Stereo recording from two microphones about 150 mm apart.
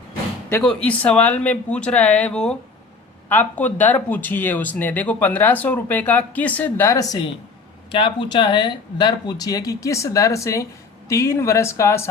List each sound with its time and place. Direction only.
0.9 s speech: 10° left (ahead or behind)
7.9 s speech: 35° left (ahead or behind); by 12.0 s 20° left (ahead or behind)